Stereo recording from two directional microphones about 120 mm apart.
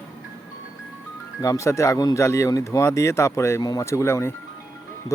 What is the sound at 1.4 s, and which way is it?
Speech, 25° left (ahead or behind).